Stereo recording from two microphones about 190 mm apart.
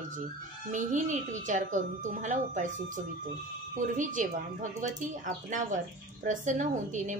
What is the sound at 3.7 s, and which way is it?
A woman's voice, 45° right (ahead or behind).